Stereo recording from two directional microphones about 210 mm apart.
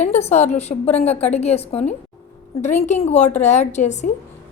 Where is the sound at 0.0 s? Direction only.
30° left (ahead or behind).